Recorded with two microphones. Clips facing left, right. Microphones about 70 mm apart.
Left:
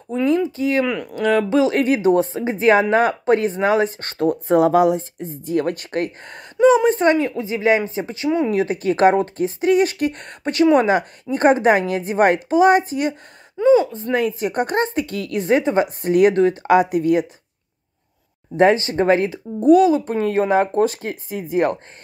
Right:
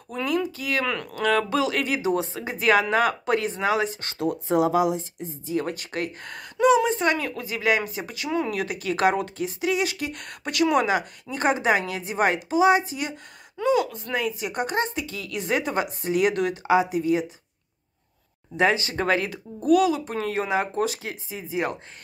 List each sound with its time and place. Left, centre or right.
0.1 s a sound: left
0.8 s speech: centre; by 6.1 s left
6.2 s speech: left
10.2 s speech: left
13.6 s speech: left
16.0 s speech: left
18.6 s speech: left